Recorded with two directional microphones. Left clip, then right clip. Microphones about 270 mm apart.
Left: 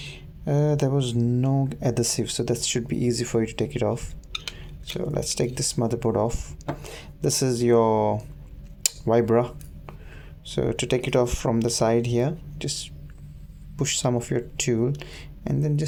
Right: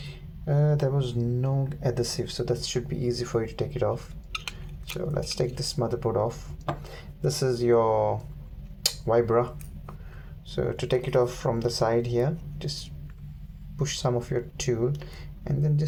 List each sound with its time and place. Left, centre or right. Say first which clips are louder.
0.0 s speech: left 4 dB; left
8.8 s a sound: left 2 dB; left
10.5 s speech: left 2 dB; left